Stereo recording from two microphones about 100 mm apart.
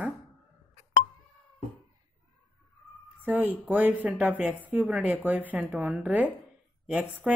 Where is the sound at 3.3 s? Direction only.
15° right (ahead or behind).